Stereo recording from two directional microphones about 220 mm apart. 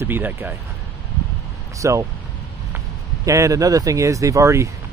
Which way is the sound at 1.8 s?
15° right (ahead or behind).